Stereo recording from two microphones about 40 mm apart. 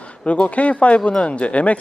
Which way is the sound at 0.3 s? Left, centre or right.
Left.